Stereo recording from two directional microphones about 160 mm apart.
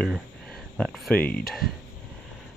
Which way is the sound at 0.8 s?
5° left (ahead or behind).